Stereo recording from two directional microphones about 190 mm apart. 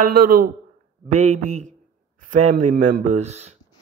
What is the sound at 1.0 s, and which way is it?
Speech, 40° right (ahead or behind).